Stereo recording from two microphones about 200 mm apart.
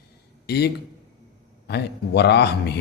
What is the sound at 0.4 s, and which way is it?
A man's voice, 55° left (ahead or behind).